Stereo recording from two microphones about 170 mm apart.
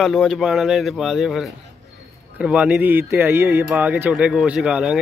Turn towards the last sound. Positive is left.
turn(degrees=-5)  # may be behind; listen again after turning